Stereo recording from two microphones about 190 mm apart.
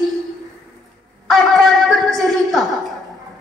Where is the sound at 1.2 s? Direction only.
Centre (ahead or behind).